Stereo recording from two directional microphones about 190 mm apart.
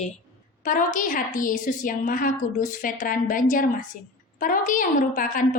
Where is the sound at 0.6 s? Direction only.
45° left (ahead or behind).